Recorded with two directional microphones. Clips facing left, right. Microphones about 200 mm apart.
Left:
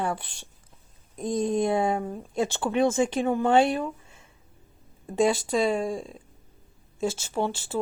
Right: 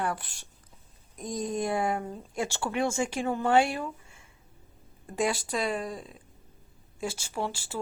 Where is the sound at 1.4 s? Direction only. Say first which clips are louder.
Left 5 dB; 25° left (ahead or behind).